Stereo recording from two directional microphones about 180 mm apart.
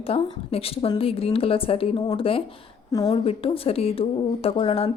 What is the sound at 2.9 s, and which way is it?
Speech, 20° left (ahead or behind).